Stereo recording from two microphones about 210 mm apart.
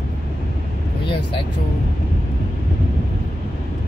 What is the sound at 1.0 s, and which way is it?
Vehicle, 25° left (ahead or behind).